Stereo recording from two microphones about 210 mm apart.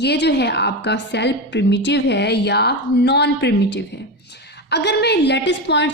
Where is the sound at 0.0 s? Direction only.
55° left (ahead or behind).